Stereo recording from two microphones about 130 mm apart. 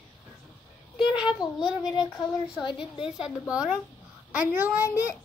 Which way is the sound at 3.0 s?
5° right (ahead or behind).